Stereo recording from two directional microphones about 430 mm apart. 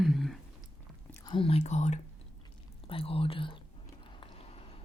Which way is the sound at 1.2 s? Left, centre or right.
Centre.